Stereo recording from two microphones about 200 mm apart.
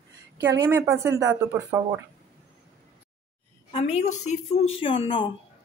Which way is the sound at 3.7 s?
30° left (ahead or behind).